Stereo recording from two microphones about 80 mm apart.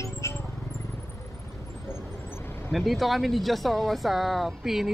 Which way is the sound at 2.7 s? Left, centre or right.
Centre.